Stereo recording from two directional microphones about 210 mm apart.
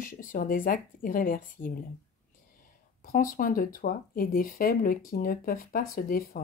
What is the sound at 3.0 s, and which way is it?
Speech, 40° left (ahead or behind).